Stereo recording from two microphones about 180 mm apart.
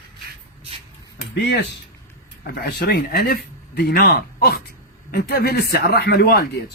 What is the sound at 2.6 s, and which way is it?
Speech, 65° left (ahead or behind).